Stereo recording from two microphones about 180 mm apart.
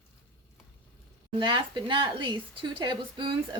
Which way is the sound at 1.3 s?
25° right (ahead or behind).